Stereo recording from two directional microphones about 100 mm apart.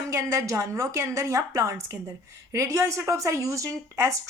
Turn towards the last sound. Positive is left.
turn(degrees=-30)  # may be behind; listen again after turning